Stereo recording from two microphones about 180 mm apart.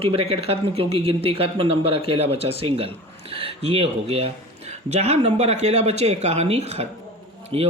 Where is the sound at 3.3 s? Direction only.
30° right (ahead or behind).